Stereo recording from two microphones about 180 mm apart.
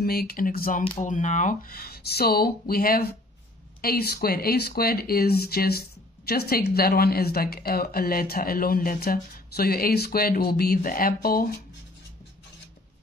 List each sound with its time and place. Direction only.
0.0 s speech: 60° left (ahead or behind)